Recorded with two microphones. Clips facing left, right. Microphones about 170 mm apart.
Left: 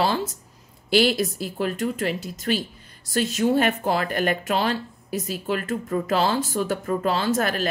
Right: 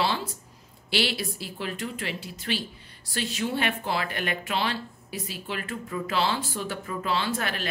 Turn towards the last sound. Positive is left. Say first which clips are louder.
# left 6 dB
turn(degrees=40)  # may be behind; listen again after turning